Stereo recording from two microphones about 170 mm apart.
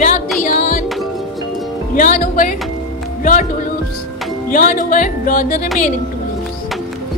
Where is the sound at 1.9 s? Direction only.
55° left (ahead or behind).